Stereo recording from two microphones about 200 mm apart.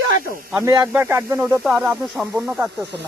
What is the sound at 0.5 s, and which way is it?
Speech, 15° right (ahead or behind).